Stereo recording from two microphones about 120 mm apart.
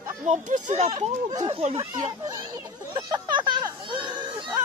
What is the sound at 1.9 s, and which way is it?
Speech, 30° right (ahead or behind).